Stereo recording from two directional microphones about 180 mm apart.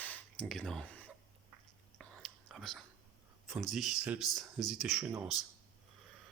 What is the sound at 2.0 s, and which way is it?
Whispering, centre (ahead or behind).